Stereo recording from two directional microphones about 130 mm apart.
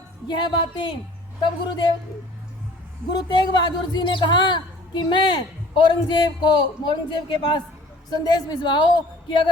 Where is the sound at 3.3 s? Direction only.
35° left (ahead or behind).